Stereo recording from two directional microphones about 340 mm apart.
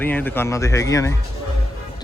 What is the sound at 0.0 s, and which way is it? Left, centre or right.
Speech, centre.